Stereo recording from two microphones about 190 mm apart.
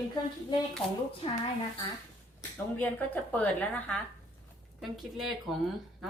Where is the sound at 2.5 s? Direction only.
10° left (ahead or behind).